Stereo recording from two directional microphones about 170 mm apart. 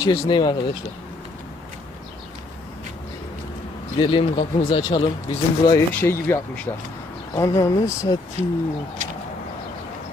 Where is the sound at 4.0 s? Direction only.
30° left (ahead or behind).